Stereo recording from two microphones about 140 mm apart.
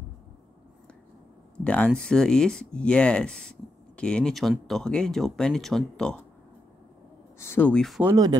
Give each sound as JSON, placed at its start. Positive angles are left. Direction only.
{"t": 1.6, "sound": "speech", "side_deg": 10}
{"t": 7.3, "sound": "speech", "side_deg": 15}